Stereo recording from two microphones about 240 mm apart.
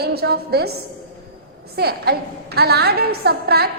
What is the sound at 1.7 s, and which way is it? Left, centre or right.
A woman's voice, right.